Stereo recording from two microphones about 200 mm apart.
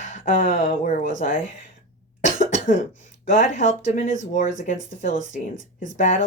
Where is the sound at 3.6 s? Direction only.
40° left (ahead or behind).